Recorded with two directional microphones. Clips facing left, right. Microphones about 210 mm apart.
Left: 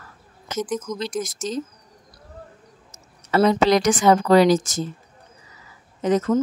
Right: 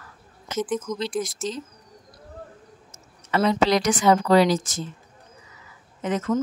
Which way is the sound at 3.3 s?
40° left (ahead or behind).